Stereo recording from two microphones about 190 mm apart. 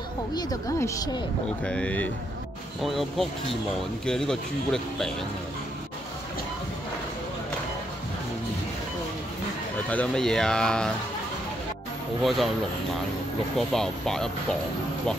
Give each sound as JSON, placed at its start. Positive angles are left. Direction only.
{"t": 0.3, "sound": "a woman's voice", "side_deg": 20}
{"t": 1.6, "sound": "speech", "side_deg": 5}
{"t": 9.8, "sound": "speech", "side_deg": 5}
{"t": 12.2, "sound": "speech", "side_deg": 0}
{"t": 13.6, "sound": "speech", "side_deg": 0}